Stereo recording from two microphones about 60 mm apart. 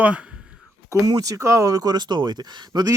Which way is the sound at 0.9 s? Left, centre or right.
Right.